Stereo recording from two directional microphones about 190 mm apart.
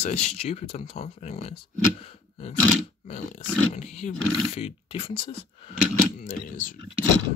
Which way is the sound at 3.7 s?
35° left (ahead or behind).